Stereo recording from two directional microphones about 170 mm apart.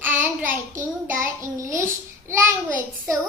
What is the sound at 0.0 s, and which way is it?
Child singing, 15° right (ahead or behind).